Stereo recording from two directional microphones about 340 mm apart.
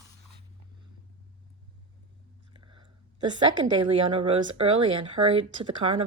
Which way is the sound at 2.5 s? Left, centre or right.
Centre.